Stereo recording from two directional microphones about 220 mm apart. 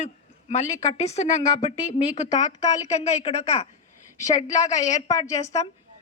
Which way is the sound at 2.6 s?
30° left (ahead or behind).